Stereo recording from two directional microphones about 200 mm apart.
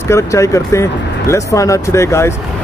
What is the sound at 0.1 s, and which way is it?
Speech, 15° left (ahead or behind).